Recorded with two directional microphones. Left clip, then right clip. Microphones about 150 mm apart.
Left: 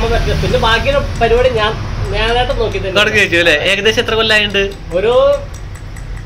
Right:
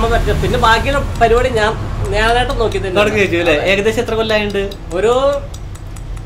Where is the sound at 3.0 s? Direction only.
5° right (ahead or behind).